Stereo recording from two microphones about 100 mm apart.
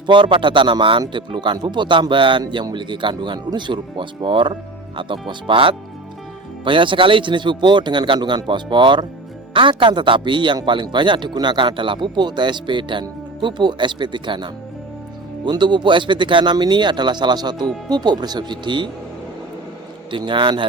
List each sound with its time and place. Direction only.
0.1 s a man's voice: 55° right (ahead or behind)
20.1 s speech: 55° right (ahead or behind)